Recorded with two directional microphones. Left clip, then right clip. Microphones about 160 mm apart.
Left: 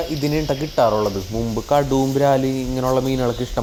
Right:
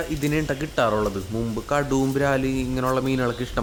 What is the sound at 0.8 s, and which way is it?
Speech, 15° right (ahead or behind).